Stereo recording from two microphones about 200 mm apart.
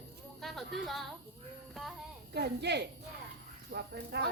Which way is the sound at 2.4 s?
55° right (ahead or behind).